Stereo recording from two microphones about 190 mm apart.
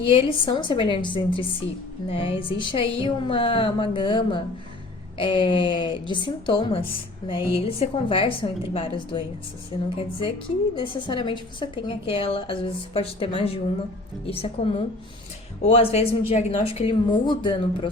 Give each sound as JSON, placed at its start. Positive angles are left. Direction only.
{"t": 0.0, "sound": "a woman's voice", "side_deg": 30}